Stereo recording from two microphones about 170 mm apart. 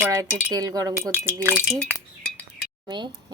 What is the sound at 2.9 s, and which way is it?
Speech, 25° right (ahead or behind).